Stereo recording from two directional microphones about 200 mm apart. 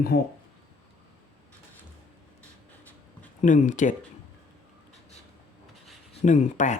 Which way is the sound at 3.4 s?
40° left (ahead or behind).